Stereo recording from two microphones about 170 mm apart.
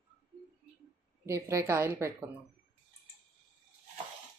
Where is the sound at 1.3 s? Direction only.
15° right (ahead or behind).